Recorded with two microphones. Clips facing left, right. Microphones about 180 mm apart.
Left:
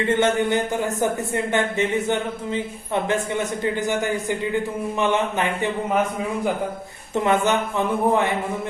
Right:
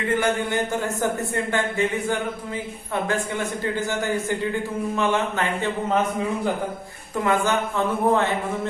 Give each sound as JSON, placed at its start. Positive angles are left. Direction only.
{"t": 0.0, "sound": "a man's voice", "side_deg": 25}
{"t": 7.3, "sound": "a man's voice", "side_deg": 20}